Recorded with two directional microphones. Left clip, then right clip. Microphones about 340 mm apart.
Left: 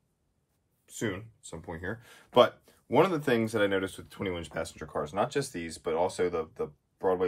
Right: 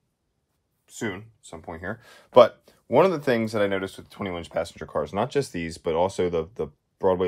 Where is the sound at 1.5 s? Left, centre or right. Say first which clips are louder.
Right 4 dB; centre.